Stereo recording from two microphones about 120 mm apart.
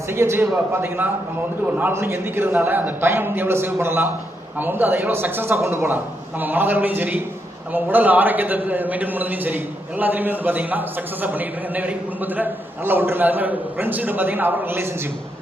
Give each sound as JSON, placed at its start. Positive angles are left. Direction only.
{"t": 0.1, "sound": "a man's voice", "side_deg": -20}